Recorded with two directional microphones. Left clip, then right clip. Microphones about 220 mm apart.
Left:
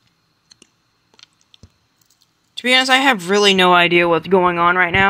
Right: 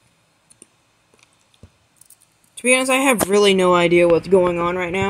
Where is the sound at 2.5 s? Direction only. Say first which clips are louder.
Left 3 dB; centre (ahead or behind).